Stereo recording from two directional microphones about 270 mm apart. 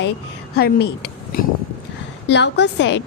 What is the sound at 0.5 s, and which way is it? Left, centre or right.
Speech, left.